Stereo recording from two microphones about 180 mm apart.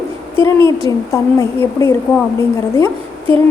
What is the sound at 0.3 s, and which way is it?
A woman's voice, 15° left (ahead or behind).